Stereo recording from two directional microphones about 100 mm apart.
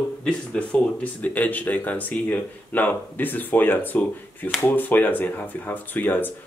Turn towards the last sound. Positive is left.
turn(degrees=20)  # may be behind; listen again after turning